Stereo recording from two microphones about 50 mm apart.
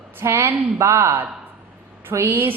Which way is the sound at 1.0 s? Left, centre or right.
Right.